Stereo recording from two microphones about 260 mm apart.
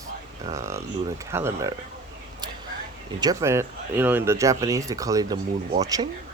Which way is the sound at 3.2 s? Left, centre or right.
Centre.